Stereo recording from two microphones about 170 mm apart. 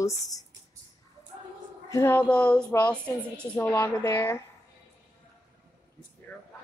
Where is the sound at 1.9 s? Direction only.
15° left (ahead or behind).